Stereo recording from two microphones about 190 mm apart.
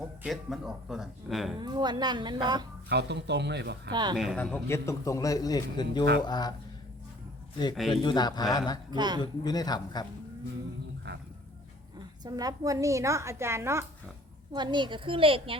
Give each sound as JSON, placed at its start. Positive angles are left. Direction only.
{"t": 0.2, "sound": "speech", "side_deg": 0}
{"t": 1.5, "sound": "a woman's voice", "side_deg": -20}
{"t": 2.9, "sound": "speech", "side_deg": -65}
{"t": 3.9, "sound": "a woman's voice", "side_deg": -20}
{"t": 4.4, "sound": "a man's voice", "side_deg": 10}
{"t": 7.9, "sound": "speech", "side_deg": 20}
{"t": 9.0, "sound": "a woman's voice", "side_deg": -20}
{"t": 9.2, "sound": "speech", "side_deg": 20}
{"t": 11.9, "sound": "a woman's voice", "side_deg": -20}